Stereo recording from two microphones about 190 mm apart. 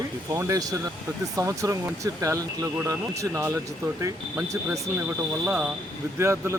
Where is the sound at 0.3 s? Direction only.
15° right (ahead or behind).